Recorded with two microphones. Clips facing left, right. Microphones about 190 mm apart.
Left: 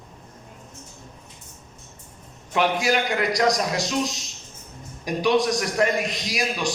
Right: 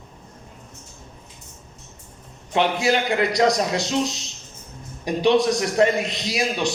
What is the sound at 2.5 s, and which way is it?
A man's voice, 25° right (ahead or behind).